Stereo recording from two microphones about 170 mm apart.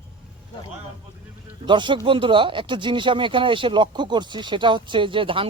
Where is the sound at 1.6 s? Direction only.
30° right (ahead or behind).